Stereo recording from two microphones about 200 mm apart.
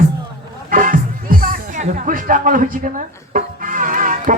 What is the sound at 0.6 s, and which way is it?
Speech, 45° right (ahead or behind).